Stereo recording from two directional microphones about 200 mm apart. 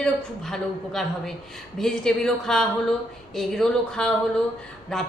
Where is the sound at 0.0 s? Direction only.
Centre (ahead or behind).